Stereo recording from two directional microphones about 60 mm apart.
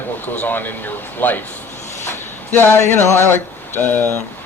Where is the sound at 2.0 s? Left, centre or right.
Left.